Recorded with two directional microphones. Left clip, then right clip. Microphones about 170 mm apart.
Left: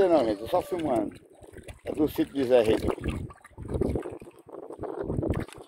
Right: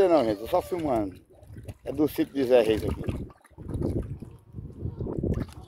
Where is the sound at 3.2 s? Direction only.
10° left (ahead or behind).